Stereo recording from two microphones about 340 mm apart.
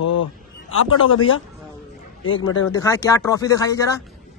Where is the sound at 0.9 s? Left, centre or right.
Left.